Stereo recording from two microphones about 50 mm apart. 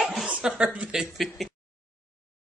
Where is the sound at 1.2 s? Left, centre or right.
Centre.